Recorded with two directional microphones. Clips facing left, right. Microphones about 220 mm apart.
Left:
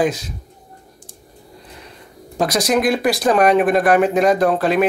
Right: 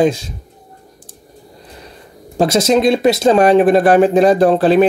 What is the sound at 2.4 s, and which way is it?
Speech, 25° right (ahead or behind).